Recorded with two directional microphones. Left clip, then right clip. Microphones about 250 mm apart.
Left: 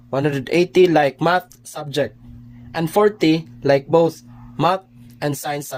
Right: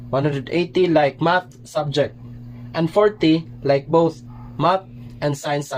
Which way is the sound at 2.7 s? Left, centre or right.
Left.